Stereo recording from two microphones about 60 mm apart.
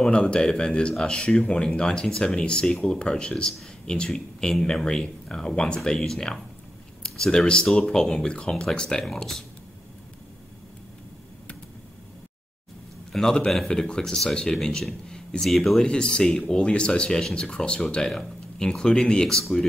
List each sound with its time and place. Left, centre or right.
0.0 s speech: centre
13.1 s a man's voice: centre
15.9 s speech: centre